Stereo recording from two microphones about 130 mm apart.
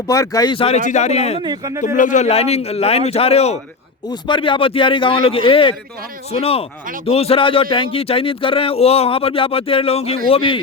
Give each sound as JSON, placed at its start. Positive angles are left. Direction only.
{"t": 0.1, "sound": "speech", "side_deg": 25}
{"t": 0.5, "sound": "speech", "side_deg": 45}
{"t": 0.8, "sound": "a man's voice", "side_deg": 70}
{"t": 1.4, "sound": "speech", "side_deg": -30}
{"t": 1.8, "sound": "speech", "side_deg": 75}
{"t": 4.1, "sound": "speech", "side_deg": 40}